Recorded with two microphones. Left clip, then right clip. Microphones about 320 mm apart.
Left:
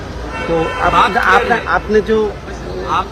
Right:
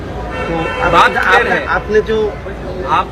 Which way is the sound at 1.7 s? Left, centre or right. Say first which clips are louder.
Even; left.